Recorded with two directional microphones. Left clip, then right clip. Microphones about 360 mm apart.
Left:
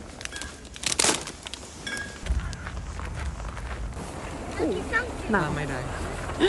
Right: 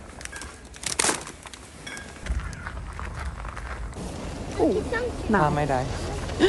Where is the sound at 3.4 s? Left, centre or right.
Centre.